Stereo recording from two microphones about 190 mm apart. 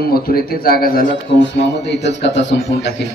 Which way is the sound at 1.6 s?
65° left (ahead or behind).